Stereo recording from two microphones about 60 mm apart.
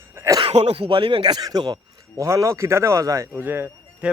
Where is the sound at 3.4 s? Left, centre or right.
Right.